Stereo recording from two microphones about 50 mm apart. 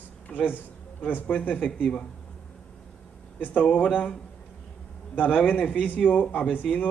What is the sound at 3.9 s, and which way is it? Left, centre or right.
A man's voice, left.